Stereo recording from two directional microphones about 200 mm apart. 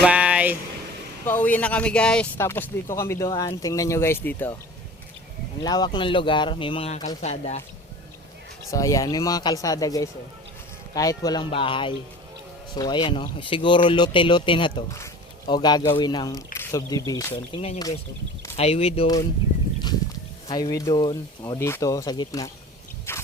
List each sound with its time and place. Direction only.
0.0 s a sound: 5° right (ahead or behind)
1.2 s speech: 10° left (ahead or behind)
5.6 s speech: 20° left (ahead or behind)
8.7 s speech: 15° left (ahead or behind)
20.5 s speech: 20° left (ahead or behind)
23.1 s a sound: 10° left (ahead or behind)